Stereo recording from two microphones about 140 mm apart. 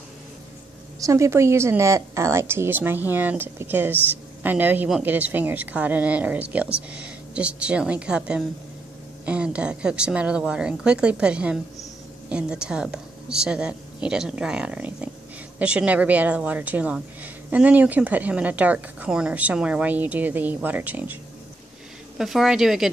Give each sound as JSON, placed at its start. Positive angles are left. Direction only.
{"t": 0.9, "sound": "a woman's voice", "side_deg": -20}
{"t": 22.2, "sound": "a woman's voice", "side_deg": 0}